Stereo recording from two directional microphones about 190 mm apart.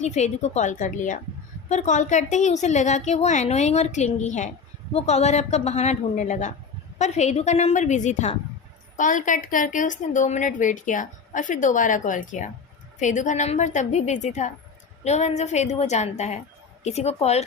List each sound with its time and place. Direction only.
0.0 s a woman's voice: 35° left (ahead or behind)